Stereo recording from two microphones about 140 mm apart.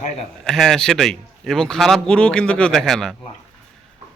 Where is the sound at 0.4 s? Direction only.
5° left (ahead or behind).